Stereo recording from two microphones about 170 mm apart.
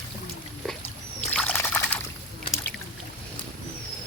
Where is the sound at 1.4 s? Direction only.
10° left (ahead or behind).